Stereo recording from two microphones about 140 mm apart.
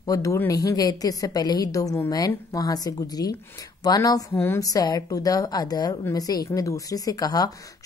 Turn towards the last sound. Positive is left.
turn(degrees=25)  # may be behind; listen again after turning